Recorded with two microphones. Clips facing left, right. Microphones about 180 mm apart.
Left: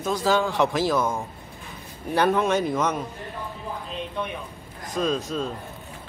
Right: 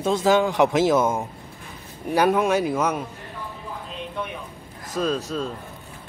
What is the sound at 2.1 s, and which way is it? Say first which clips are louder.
Speech: right 2 dB; 10° right (ahead or behind).